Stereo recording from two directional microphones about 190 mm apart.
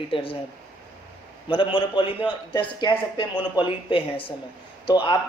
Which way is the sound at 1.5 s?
25° left (ahead or behind).